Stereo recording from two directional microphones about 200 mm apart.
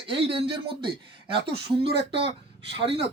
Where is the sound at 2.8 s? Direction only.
30° right (ahead or behind).